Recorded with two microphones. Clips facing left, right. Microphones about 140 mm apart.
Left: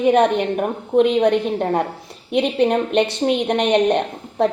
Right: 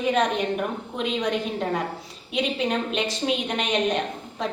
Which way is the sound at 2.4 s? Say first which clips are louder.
Left 8 dB; 65° left (ahead or behind).